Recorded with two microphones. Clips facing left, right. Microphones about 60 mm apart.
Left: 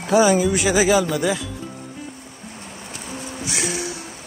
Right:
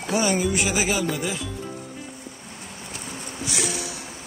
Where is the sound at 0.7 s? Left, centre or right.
Left.